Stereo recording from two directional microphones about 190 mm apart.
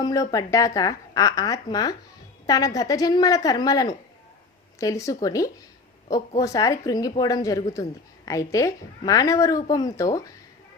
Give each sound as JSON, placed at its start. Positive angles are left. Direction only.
{"t": 0.0, "sound": "speech", "side_deg": 20}